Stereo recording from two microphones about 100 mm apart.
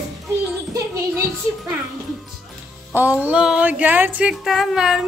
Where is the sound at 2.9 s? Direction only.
15° right (ahead or behind).